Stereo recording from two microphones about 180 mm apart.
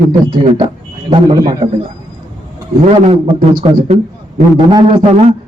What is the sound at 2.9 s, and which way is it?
Speech, 30° right (ahead or behind).